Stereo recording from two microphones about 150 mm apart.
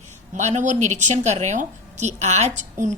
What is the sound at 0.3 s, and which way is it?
A woman's voice, 50° right (ahead or behind).